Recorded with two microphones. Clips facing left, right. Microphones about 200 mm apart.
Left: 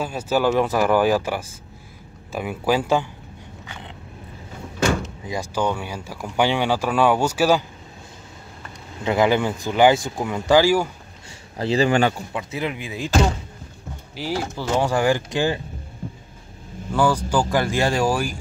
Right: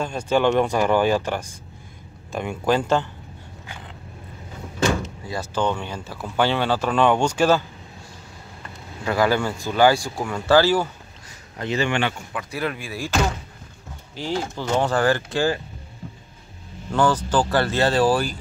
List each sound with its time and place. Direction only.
0.0 s speech: 5° left (ahead or behind)
5.2 s speech: 15° left (ahead or behind)
9.0 s speech: 20° left (ahead or behind)
11.5 s speech: 35° left (ahead or behind)
12.3 s speech: 25° left (ahead or behind)
16.9 s speech: 10° left (ahead or behind)